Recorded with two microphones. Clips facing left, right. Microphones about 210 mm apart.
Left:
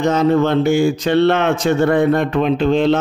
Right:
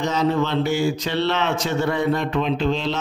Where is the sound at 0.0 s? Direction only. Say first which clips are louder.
Left 7 dB; 50° left (ahead or behind).